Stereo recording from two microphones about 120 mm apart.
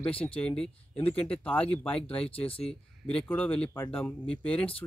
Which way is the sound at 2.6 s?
10° left (ahead or behind).